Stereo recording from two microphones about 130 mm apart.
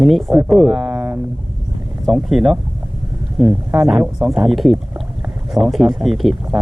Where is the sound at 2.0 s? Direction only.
Centre (ahead or behind).